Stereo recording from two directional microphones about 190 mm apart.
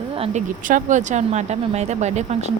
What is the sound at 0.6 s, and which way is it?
Speech, 45° right (ahead or behind).